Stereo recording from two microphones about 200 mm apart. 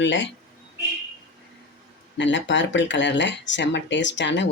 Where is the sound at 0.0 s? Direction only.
65° left (ahead or behind).